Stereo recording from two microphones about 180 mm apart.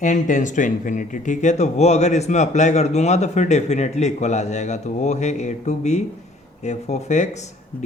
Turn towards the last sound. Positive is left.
turn(degrees=40)  # may be behind; listen again after turning